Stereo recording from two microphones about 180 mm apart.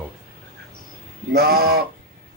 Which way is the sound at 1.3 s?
60° right (ahead or behind).